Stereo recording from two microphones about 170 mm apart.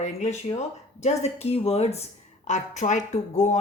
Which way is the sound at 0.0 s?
45° left (ahead or behind).